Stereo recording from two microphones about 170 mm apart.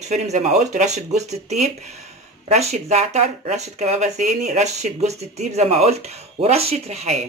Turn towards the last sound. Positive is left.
turn(degrees=-40)  # may be behind; listen again after turning